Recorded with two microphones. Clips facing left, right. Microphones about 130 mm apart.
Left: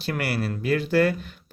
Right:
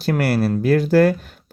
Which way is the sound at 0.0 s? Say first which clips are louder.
Right 8 dB; 40° right (ahead or behind).